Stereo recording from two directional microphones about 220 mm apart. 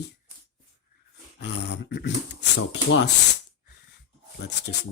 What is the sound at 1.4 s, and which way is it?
Speech, 50° left (ahead or behind).